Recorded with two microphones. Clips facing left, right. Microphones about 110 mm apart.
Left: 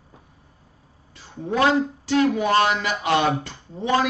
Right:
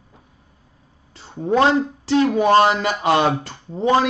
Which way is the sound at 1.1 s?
30° right (ahead or behind).